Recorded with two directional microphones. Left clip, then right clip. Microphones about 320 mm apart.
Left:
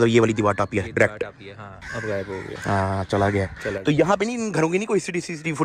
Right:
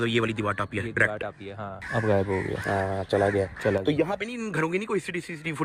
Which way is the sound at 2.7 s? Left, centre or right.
Left.